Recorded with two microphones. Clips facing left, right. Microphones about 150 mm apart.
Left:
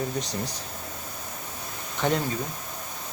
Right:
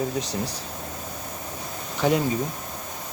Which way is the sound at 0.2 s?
30° right (ahead or behind).